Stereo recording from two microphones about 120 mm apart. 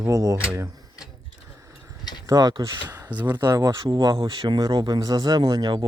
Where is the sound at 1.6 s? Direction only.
25° right (ahead or behind).